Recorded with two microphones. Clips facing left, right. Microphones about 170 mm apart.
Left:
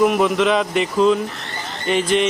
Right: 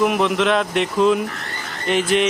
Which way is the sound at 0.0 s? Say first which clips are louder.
Left 2 dB; centre (ahead or behind).